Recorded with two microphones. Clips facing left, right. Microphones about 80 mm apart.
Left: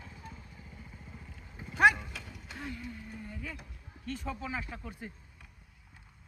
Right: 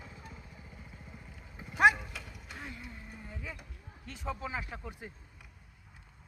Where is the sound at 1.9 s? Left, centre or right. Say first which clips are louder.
Even; centre.